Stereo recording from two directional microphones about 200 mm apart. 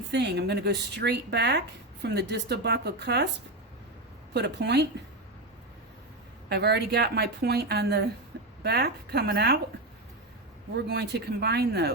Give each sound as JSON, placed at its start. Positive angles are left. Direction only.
{"t": 0.1, "sound": "speech", "side_deg": -60}
{"t": 4.4, "sound": "speech", "side_deg": -55}
{"t": 6.5, "sound": "a woman's voice", "side_deg": -55}
{"t": 10.8, "sound": "a woman's voice", "side_deg": -55}